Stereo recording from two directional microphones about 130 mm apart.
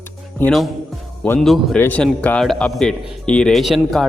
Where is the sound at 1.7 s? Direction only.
15° left (ahead or behind).